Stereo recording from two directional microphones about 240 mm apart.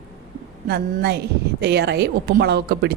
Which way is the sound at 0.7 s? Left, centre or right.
Right.